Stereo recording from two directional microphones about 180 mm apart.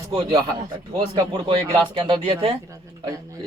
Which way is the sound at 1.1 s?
20° right (ahead or behind).